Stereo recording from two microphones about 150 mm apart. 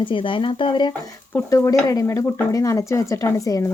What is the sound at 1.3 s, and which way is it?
Speech, 20° left (ahead or behind).